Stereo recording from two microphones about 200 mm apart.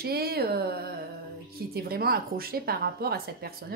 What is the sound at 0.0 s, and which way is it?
A woman's voice, 50° right (ahead or behind).